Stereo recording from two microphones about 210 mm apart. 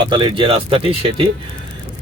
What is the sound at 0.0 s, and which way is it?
Speech, 20° right (ahead or behind).